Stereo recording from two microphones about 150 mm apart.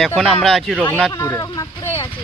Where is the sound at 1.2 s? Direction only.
20° left (ahead or behind).